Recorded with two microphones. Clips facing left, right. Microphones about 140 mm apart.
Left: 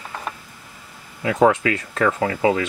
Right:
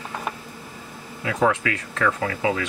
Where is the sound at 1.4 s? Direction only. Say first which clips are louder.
Left 3 dB; 25° left (ahead or behind).